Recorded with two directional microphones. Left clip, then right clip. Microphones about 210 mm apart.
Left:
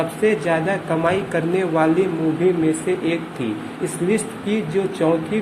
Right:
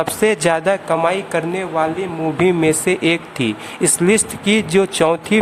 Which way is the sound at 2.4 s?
35° right (ahead or behind).